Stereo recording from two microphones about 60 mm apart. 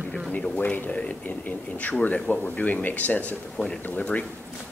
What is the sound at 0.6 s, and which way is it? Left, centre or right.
Speech, left.